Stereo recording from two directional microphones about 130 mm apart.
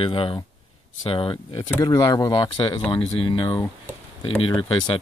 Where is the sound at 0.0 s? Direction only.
45° left (ahead or behind).